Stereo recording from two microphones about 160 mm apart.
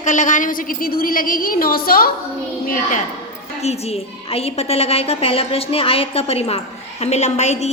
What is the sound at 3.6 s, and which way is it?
A woman's voice, 40° left (ahead or behind).